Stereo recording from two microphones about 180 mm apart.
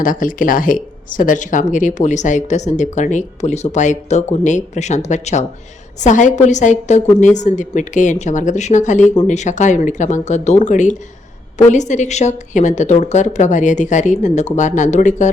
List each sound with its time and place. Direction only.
0.0 s a woman's voice: 50° left (ahead or behind)